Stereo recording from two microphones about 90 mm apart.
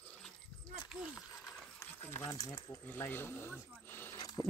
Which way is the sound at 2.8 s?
20° left (ahead or behind).